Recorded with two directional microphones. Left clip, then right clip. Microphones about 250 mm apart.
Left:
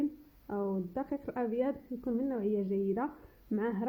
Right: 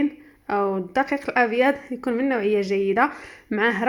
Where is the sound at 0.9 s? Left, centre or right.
Centre.